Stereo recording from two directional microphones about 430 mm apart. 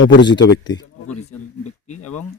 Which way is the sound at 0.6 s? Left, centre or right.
Centre.